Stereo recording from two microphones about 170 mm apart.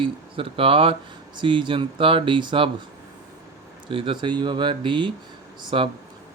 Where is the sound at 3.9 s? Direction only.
30° right (ahead or behind).